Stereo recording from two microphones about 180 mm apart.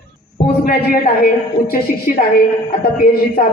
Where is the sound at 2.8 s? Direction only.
50° left (ahead or behind).